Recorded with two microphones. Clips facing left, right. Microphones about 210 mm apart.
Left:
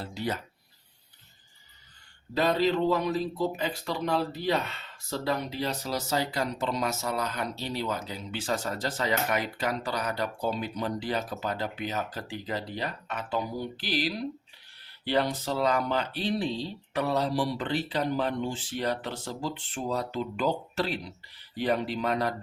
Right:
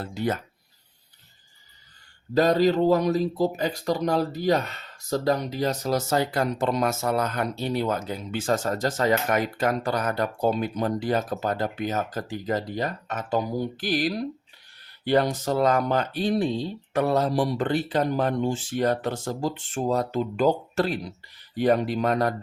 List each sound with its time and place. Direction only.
0.0 s speech: 50° right (ahead or behind)
2.3 s speech: 40° right (ahead or behind)